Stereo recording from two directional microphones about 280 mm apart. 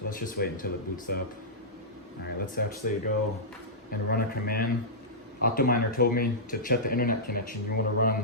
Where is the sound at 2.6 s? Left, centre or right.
Left.